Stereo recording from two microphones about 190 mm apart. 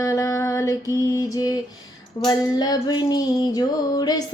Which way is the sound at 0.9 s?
15° left (ahead or behind).